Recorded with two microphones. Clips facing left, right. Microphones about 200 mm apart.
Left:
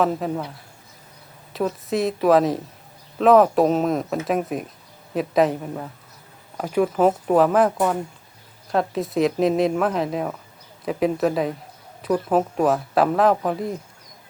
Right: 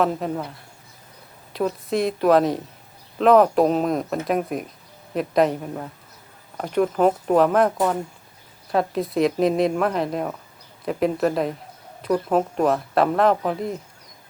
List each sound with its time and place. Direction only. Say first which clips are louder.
0.0 s speech: left 1 dB; centre (ahead or behind)